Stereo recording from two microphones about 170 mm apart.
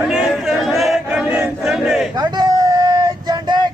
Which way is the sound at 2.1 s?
25° right (ahead or behind).